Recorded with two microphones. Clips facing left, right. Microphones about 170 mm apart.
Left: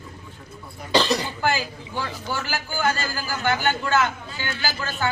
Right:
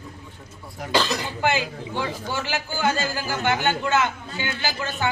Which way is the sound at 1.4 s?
20° right (ahead or behind).